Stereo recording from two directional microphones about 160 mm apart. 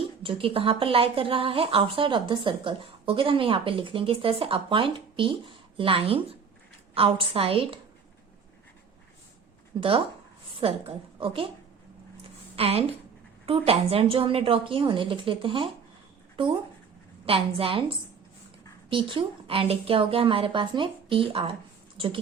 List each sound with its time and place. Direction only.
0.2 s speech: 35° right (ahead or behind)
9.7 s speech: 30° right (ahead or behind)
12.5 s a woman's voice: 40° right (ahead or behind)